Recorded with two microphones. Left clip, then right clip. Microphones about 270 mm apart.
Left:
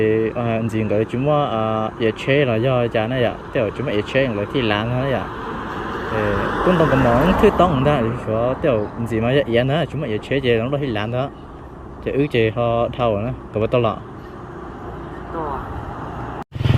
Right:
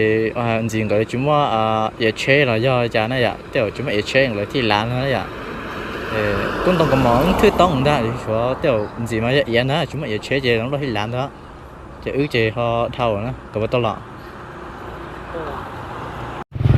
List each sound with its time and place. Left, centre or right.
0.0 s speech: centre
6.7 s speech: right
8.3 s speech: centre